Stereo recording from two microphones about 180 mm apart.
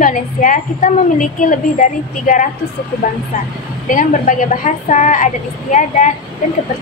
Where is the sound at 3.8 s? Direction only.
45° left (ahead or behind).